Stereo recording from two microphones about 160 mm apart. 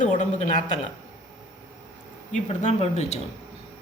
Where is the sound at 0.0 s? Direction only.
50° left (ahead or behind).